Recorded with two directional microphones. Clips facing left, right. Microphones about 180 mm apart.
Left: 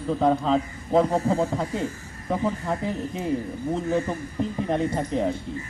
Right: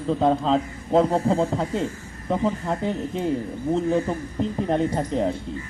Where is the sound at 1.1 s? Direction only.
30° right (ahead or behind).